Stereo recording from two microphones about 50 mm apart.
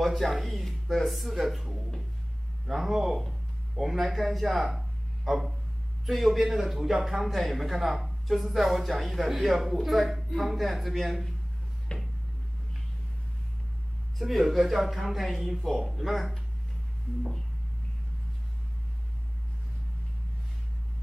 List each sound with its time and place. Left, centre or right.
0.0 s a woman's voice: centre
11.9 s a sound: centre
14.1 s a woman's voice: centre